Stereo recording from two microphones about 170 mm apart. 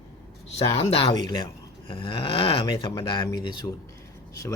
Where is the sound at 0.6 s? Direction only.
30° left (ahead or behind).